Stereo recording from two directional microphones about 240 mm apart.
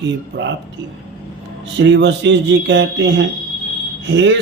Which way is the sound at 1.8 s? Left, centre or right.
Right.